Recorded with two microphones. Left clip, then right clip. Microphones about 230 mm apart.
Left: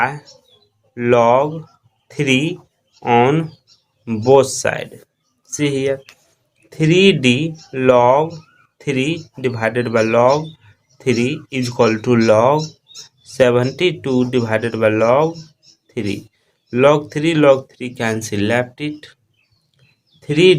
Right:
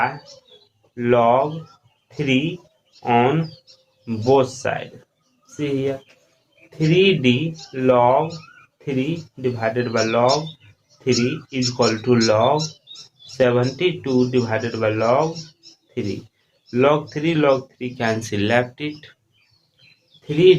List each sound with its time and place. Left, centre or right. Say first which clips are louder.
0.9 s speech: left 3 dB; left
11.5 s speech: left 5 dB; left
16.6 s speech: left 4 dB; left
20.2 s speech: left 2 dB; left